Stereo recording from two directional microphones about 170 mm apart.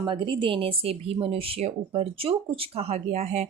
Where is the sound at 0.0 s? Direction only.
30° right (ahead or behind).